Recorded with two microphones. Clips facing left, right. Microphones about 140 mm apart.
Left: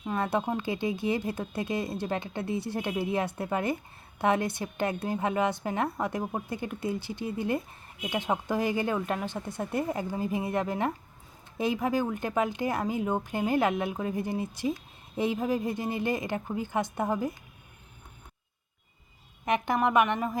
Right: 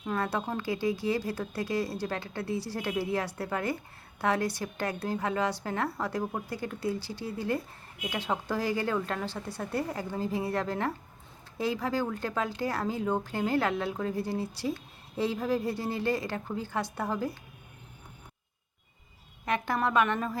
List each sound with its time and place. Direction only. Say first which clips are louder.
0.0 s speech: left 2 dB; 15° left (ahead or behind)
19.5 s a woman's voice: left 3 dB; 20° left (ahead or behind)